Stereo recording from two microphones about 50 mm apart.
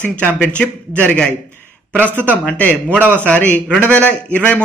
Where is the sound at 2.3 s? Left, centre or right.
Left.